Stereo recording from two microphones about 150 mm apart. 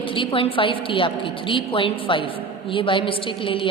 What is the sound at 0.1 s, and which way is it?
A woman's voice, 35° left (ahead or behind).